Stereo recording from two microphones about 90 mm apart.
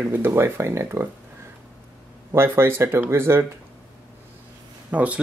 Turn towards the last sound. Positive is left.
turn(degrees=-15)  # may be behind; listen again after turning